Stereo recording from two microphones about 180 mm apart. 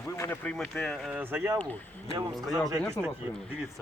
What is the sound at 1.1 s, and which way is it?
Speech, 10° right (ahead or behind).